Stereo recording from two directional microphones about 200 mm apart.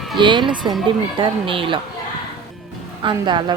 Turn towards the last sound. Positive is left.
turn(degrees=-25)  # may be behind; listen again after turning